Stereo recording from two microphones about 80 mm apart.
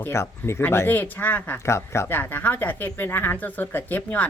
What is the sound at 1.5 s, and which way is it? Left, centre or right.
Speech, left.